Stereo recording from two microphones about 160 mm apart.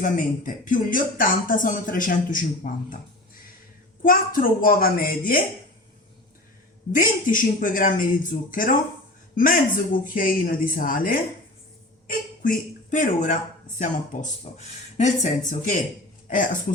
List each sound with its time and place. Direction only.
0.0 s speech: 55° left (ahead or behind)
4.0 s speech: 60° left (ahead or behind)
6.9 s speech: 55° left (ahead or behind)